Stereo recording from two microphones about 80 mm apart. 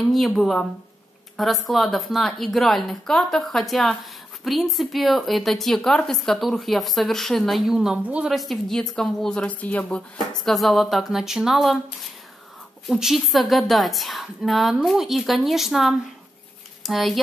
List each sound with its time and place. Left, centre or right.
0.1 s a woman's voice: centre
8.3 s a woman's voice: centre
10.5 s a woman's voice: centre
12.9 s a woman's voice: centre